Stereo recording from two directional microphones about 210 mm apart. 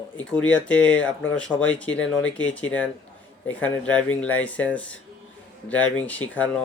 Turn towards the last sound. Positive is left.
turn(degrees=5)  # may be behind; listen again after turning